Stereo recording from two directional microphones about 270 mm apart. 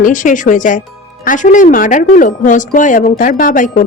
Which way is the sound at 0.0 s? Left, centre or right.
Left.